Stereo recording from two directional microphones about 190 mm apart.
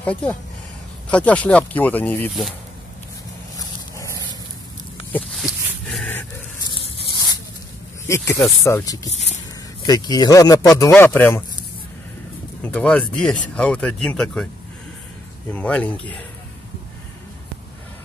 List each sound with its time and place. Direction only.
0.0 s speech: 5° left (ahead or behind)
3.5 s dog: 15° left (ahead or behind)
5.1 s a sound: centre (ahead or behind)
5.9 s dog: 5° left (ahead or behind)
6.7 s a sound: 25° left (ahead or behind)
8.1 s speech: 15° left (ahead or behind)
12.6 s speech: 5° left (ahead or behind)
15.5 s speech: 5° left (ahead or behind)